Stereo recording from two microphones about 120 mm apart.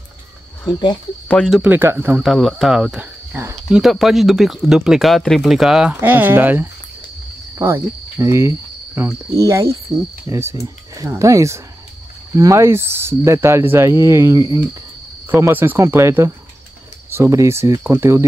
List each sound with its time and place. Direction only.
0.7 s speech: 40° left (ahead or behind)
1.3 s speech: 5° left (ahead or behind)
1.6 s speech: 20° right (ahead or behind)
2.2 s speech: centre (ahead or behind)
3.3 s speech: 20° right (ahead or behind)
3.7 s speech: centre (ahead or behind)
5.9 s speech: 15° right (ahead or behind)
7.5 s cricket: 25° right (ahead or behind)
10.2 s speech: 25° right (ahead or behind)